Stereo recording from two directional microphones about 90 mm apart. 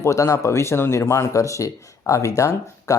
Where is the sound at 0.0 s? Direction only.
35° left (ahead or behind).